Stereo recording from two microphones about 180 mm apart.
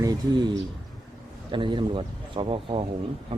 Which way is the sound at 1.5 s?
25° right (ahead or behind).